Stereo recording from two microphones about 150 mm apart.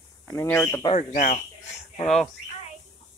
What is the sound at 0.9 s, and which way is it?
Speech, 55° left (ahead or behind).